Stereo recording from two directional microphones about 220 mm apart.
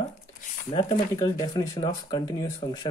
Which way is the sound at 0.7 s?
25° left (ahead or behind).